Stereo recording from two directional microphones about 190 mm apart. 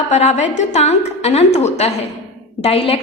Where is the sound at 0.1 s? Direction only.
35° left (ahead or behind).